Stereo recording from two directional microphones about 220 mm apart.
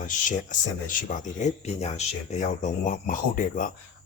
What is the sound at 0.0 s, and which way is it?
Speech, 35° left (ahead or behind).